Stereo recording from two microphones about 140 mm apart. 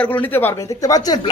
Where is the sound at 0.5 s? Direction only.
25° left (ahead or behind).